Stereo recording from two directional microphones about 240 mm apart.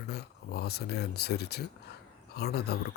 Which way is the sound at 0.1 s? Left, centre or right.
Left.